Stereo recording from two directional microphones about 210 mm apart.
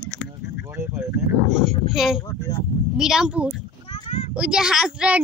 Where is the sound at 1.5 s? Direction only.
Centre (ahead or behind).